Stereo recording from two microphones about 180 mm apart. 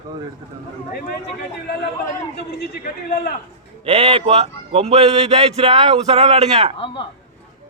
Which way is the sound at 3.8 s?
35° right (ahead or behind).